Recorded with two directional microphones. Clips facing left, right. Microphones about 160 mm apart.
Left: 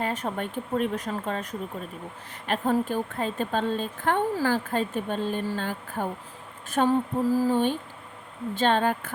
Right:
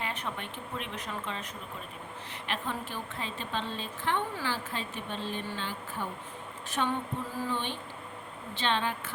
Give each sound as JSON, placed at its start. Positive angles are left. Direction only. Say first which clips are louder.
{"t": 0.0, "sound": "a woman's voice", "louder": "left 8 dB", "side_deg": 45}
{"t": 2.5, "sound": "a woman's voice", "louder": "left 11 dB", "side_deg": 45}
{"t": 6.7, "sound": "a sound", "louder": "left 9 dB", "side_deg": 40}
{"t": 8.5, "sound": "a woman's voice", "louder": "left 8 dB", "side_deg": 45}